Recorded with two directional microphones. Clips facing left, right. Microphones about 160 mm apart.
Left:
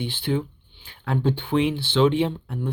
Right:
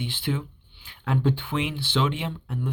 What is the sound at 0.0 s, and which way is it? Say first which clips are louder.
Speech: left 4 dB; 30° left (ahead or behind).